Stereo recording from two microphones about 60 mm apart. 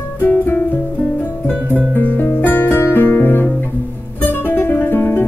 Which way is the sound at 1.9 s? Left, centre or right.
Left.